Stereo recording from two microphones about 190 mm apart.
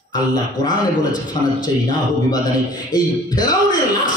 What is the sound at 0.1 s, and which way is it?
A man's voice, 20° left (ahead or behind).